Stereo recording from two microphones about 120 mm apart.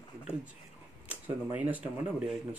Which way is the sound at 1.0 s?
15° right (ahead or behind).